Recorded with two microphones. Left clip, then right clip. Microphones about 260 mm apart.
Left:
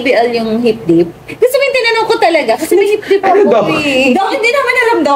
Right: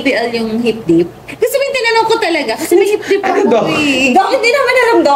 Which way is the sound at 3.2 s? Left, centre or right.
Centre.